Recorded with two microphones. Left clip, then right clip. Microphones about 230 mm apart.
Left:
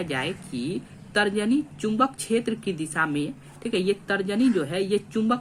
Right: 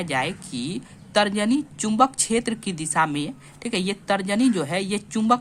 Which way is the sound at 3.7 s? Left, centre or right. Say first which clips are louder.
Right 1 dB; right.